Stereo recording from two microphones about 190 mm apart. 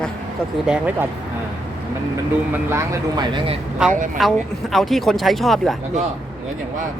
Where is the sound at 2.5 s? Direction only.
15° right (ahead or behind).